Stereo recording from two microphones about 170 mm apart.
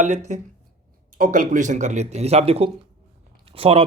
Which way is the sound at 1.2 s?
50° right (ahead or behind).